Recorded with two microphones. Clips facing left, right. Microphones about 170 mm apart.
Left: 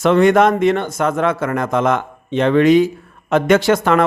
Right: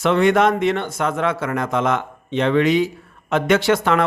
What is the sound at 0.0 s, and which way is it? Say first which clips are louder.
Speech: left 4 dB; 45° left (ahead or behind).